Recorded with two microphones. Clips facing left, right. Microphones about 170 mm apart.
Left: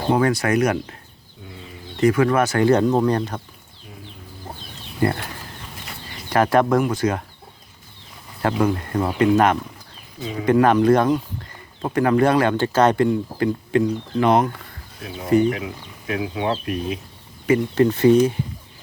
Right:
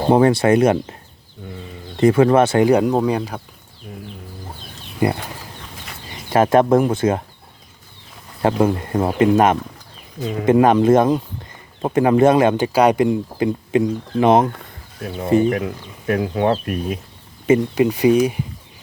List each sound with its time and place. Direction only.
0.1 s speech: 30° right (ahead or behind)
2.0 s speech: 30° right (ahead or behind)
2.6 s speech: 15° right (ahead or behind)
4.9 s speech: 15° right (ahead or behind)
8.4 s speech: 25° right (ahead or behind)
16.0 s speech: 50° right (ahead or behind)
17.7 s speech: 10° right (ahead or behind)